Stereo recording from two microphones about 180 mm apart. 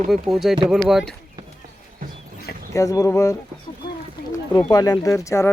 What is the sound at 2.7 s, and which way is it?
Speech, 20° left (ahead or behind).